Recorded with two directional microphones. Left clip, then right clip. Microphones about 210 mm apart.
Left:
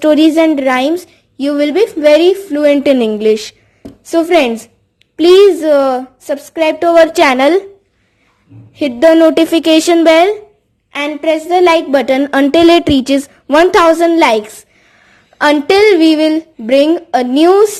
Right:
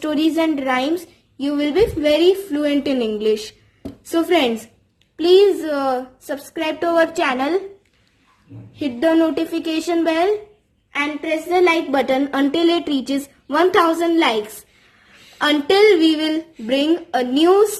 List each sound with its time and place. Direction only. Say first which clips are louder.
0.0 s a woman's voice: left 10 dB; 35° left (ahead or behind)
8.8 s a woman's voice: left 10 dB; 40° left (ahead or behind)
15.4 s a woman's voice: left 6 dB; 35° left (ahead or behind)